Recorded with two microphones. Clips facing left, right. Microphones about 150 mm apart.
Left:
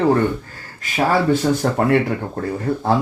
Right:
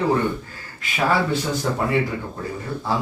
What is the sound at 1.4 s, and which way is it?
Speech, 55° left (ahead or behind).